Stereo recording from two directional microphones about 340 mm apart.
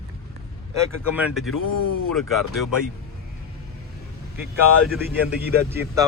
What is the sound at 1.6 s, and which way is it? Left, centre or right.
Speech, left.